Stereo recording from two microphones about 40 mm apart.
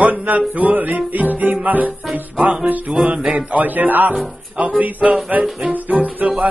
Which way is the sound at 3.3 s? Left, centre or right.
Right.